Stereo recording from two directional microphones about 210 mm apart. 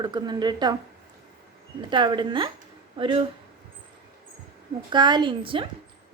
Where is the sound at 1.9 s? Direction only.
20° right (ahead or behind).